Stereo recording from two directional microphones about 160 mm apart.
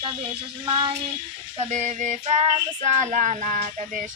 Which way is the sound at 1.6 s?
45° right (ahead or behind).